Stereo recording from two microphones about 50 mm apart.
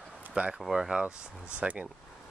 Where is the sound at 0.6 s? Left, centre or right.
Centre.